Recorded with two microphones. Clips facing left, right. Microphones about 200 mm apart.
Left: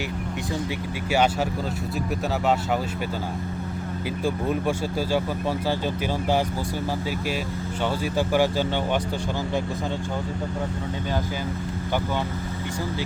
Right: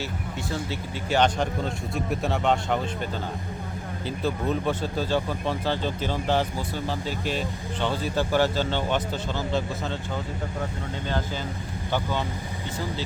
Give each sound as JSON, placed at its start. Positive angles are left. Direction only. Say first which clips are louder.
{"t": 1.1, "sound": "speech", "louder": "even", "side_deg": 10}
{"t": 4.2, "sound": "speech", "louder": "left 1 dB", "side_deg": 10}
{"t": 7.8, "sound": "speech", "louder": "left 1 dB", "side_deg": 10}